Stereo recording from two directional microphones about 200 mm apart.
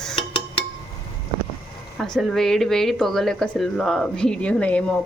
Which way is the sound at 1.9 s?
Centre (ahead or behind).